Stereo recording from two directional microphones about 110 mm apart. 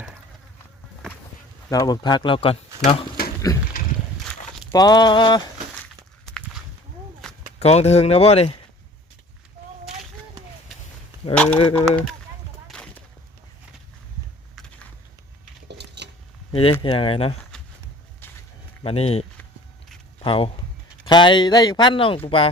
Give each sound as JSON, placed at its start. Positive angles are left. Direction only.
{"t": 1.7, "sound": "speech", "side_deg": 35}
{"t": 4.7, "sound": "a sound", "side_deg": 40}
{"t": 5.7, "sound": "a sound", "side_deg": 10}
{"t": 7.2, "sound": "walk", "side_deg": 5}
{"t": 7.6, "sound": "speech", "side_deg": 75}
{"t": 9.9, "sound": "a sound", "side_deg": -5}
{"t": 11.4, "sound": "speech", "side_deg": 65}
{"t": 12.6, "sound": "a sound", "side_deg": 5}
{"t": 16.5, "sound": "speech", "side_deg": 60}
{"t": 18.8, "sound": "speech", "side_deg": 65}
{"t": 20.2, "sound": "speech", "side_deg": 55}
{"t": 21.0, "sound": "speech", "side_deg": 45}